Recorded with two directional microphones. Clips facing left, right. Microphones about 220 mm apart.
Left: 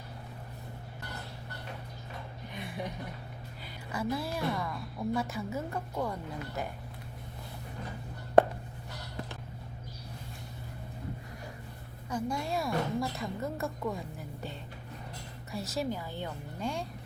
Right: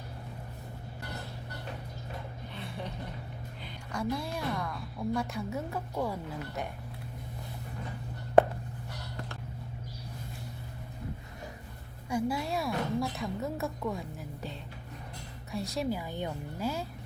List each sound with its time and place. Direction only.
2.5 s a sound: 15° left (ahead or behind)
3.9 s a woman's voice: 5° left (ahead or behind)
12.0 s a woman's voice: 5° right (ahead or behind)
15.5 s a woman's voice: centre (ahead or behind)
16.0 s speech: 15° right (ahead or behind)